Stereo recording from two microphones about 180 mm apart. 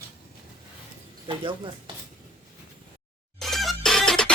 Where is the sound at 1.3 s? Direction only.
25° right (ahead or behind).